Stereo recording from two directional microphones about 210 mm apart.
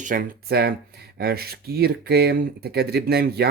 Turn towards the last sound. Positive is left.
turn(degrees=-50)  # may be behind; listen again after turning